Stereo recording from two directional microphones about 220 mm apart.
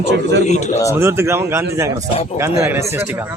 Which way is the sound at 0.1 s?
50° right (ahead or behind).